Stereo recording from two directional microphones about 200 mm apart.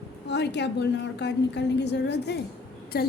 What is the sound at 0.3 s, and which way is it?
A woman's voice, 60° left (ahead or behind).